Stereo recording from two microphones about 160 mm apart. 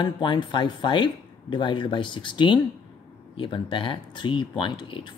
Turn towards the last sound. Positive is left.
turn(degrees=30)  # may be behind; listen again after turning